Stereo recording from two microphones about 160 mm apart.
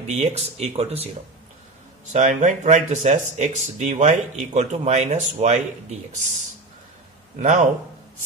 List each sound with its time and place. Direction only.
0.0 s speech: 45° right (ahead or behind)
2.1 s speech: 50° right (ahead or behind)
7.3 s speech: 50° right (ahead or behind)